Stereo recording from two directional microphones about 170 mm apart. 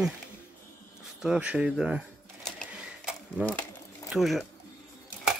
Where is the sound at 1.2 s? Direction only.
5° right (ahead or behind).